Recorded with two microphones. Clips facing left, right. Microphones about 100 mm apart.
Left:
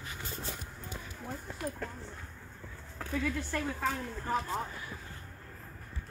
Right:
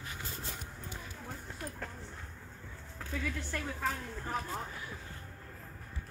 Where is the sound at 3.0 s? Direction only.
65° left (ahead or behind).